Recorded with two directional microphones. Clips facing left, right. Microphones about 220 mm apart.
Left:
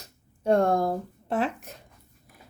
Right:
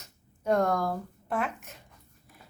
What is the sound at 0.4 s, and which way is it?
Speech, 30° left (ahead or behind).